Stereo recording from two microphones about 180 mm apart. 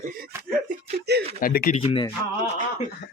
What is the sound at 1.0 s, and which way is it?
Speech, 65° right (ahead or behind).